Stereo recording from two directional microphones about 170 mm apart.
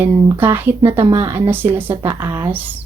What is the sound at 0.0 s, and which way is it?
Speech, 10° right (ahead or behind).